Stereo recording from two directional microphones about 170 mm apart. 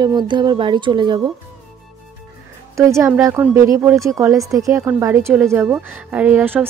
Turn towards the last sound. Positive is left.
turn(degrees=-10)  # may be behind; listen again after turning